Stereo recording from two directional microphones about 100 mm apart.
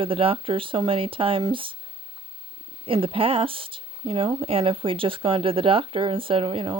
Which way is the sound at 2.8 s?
65° right (ahead or behind).